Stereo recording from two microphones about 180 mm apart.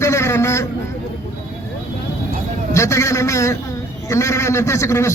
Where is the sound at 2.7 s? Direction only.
15° left (ahead or behind).